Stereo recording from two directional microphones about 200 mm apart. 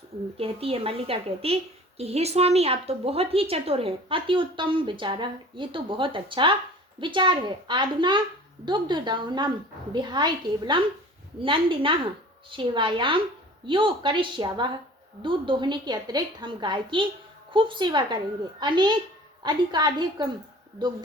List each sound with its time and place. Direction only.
0.3 s a woman's voice: 30° right (ahead or behind)